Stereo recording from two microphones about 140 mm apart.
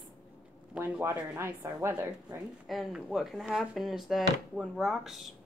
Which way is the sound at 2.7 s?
Centre (ahead or behind).